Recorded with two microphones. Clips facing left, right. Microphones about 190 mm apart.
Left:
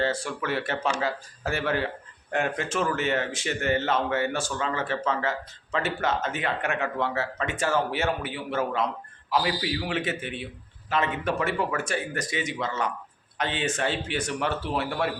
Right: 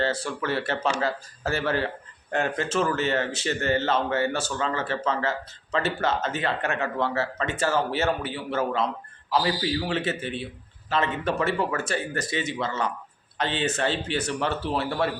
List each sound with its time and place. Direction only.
0.0 s speech: 10° left (ahead or behind)
10.2 s a man's voice: 35° right (ahead or behind)
10.4 s speech: 15° left (ahead or behind)